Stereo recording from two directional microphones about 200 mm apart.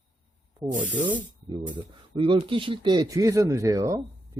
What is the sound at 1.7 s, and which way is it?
Speech, 25° right (ahead or behind).